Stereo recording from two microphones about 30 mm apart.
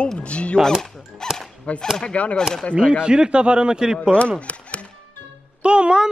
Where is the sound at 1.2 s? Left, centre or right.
Left.